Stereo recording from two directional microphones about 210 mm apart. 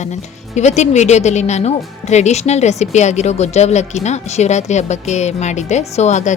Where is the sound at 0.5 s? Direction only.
35° left (ahead or behind).